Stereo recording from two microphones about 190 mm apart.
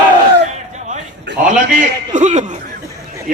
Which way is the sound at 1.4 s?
40° right (ahead or behind).